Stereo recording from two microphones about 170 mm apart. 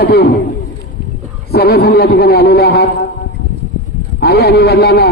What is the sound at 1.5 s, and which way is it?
A man's voice, 70° left (ahead or behind).